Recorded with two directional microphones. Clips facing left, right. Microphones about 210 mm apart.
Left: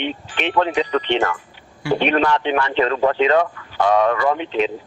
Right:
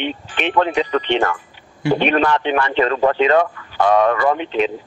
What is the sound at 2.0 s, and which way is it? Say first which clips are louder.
Speech: left 1 dB; 55° right (ahead or behind).